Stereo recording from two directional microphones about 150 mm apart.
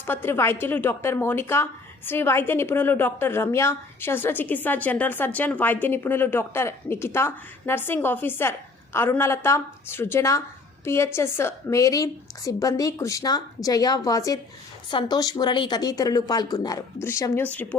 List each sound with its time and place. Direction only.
0.0 s a woman's voice: 15° left (ahead or behind)